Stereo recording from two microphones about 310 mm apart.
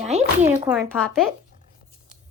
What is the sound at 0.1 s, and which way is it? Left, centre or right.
Speech, right.